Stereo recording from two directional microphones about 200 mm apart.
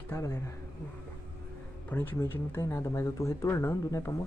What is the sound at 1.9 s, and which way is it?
Speech, 10° left (ahead or behind).